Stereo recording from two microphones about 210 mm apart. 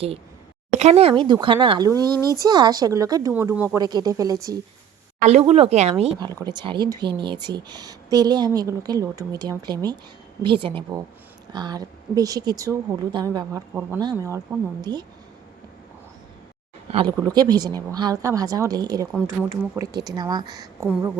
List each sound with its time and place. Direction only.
0.8 s speech: 30° right (ahead or behind)
5.2 s speech: 30° right (ahead or behind)
16.9 s speech: 25° right (ahead or behind)